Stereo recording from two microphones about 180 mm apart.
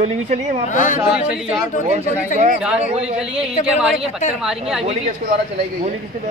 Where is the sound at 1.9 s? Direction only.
35° right (ahead or behind).